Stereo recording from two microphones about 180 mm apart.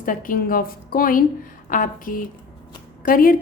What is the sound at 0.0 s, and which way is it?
A woman's voice, 50° left (ahead or behind).